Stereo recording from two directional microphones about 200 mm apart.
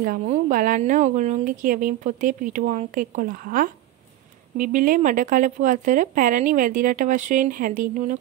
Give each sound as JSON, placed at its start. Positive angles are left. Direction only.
{"t": 0.0, "sound": "a woman's voice", "side_deg": -40}